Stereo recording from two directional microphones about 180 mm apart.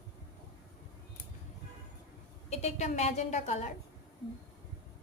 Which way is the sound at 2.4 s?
35° left (ahead or behind).